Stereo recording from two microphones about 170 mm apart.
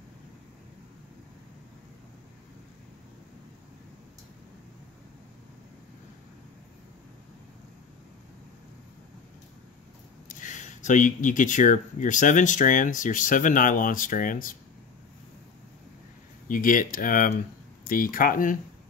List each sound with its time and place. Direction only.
10.2 s speech: 45° left (ahead or behind)
16.4 s speech: 55° left (ahead or behind)